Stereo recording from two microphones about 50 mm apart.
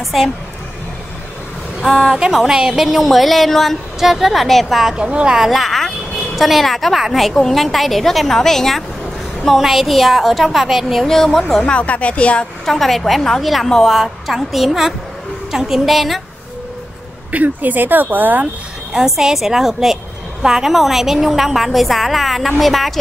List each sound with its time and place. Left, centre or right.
1.8 s speech: centre
2.3 s a woman's voice: centre
4.9 s a woman's voice: centre
5.4 s a sound: centre
7.0 s a woman's voice: centre
9.6 s a woman's voice: centre
11.1 s speech: centre
11.6 s speech: left
12.6 s a woman's voice: centre
17.3 s speech: right
18.9 s a woman's voice: centre